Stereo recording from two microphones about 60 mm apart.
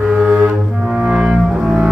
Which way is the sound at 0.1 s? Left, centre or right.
Centre.